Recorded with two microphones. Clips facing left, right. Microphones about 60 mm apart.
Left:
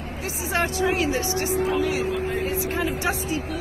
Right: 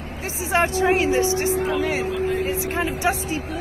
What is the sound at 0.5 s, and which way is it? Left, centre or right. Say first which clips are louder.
Speech: right 4 dB; right.